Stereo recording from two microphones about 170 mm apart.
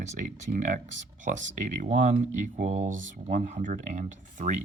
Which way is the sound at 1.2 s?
45° right (ahead or behind).